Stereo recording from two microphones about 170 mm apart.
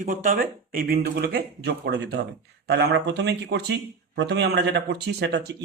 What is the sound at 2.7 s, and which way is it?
Speech, 90° right.